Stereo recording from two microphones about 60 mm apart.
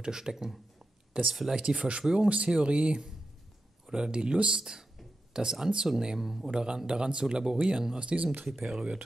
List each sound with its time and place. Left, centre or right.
0.0 s speech: centre
1.6 s speech: centre
8.5 s speech: centre